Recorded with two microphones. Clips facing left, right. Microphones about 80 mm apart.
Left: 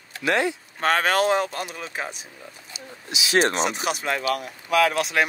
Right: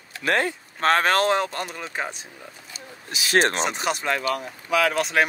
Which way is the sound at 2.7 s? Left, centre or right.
Right.